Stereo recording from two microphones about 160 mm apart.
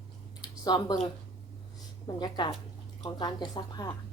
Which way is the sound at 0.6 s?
25° left (ahead or behind).